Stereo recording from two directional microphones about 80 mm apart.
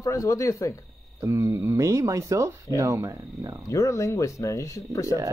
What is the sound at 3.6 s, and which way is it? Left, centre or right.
Speech, left.